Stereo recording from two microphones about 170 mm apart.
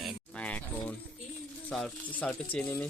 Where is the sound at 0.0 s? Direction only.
10° left (ahead or behind).